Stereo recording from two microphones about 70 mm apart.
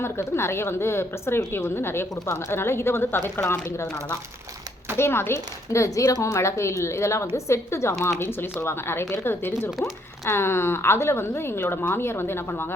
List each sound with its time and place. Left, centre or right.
0.0 s a woman's voice: left
3.5 s a woman's voice: left
4.9 s a woman's voice: left